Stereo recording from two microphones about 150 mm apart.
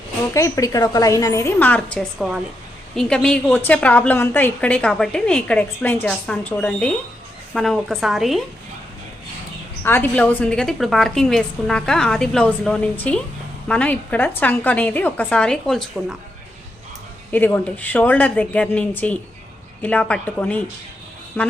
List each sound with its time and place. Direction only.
0.3 s a woman's voice: 20° left (ahead or behind)
2.1 s a woman's voice: centre (ahead or behind)
9.8 s a woman's voice: 15° left (ahead or behind)
17.3 s a woman's voice: 10° left (ahead or behind)